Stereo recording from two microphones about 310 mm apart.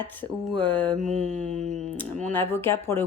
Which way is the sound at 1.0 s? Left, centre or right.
Right.